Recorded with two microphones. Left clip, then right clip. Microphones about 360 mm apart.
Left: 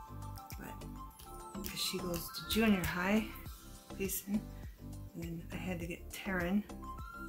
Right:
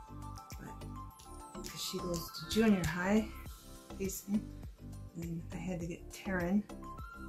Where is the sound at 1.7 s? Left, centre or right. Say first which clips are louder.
Left 1 dB; centre.